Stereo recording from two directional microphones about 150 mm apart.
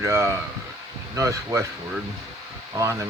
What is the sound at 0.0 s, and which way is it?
Speech, 15° right (ahead or behind).